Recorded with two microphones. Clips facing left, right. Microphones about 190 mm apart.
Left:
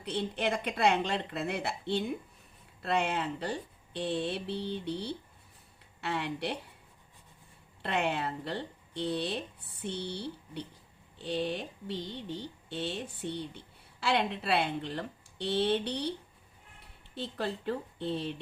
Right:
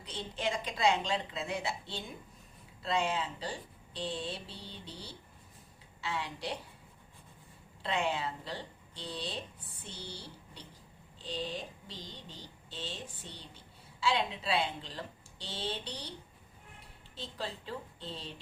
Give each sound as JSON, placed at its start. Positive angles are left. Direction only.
{"t": 0.0, "sound": "speech", "side_deg": 60}
{"t": 7.8, "sound": "speech", "side_deg": 60}
{"t": 17.2, "sound": "speech", "side_deg": 60}